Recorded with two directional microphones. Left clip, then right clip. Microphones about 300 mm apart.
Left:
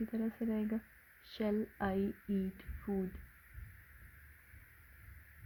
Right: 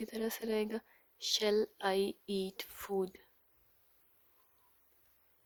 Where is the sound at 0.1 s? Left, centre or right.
Right.